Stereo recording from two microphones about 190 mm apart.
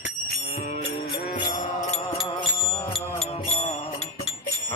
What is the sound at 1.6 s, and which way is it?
Music, 35° left (ahead or behind).